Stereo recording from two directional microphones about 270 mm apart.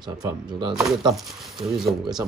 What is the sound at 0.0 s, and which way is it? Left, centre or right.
Speech, centre.